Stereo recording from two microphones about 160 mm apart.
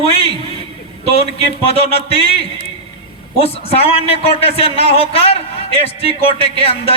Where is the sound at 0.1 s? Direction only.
40° left (ahead or behind).